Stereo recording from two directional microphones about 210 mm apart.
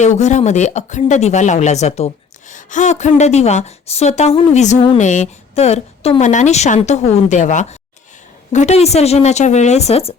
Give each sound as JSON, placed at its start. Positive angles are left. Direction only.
{"t": 0.0, "sound": "speech", "side_deg": 35}